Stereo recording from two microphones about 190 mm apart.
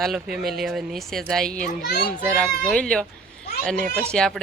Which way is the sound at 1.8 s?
55° left (ahead or behind).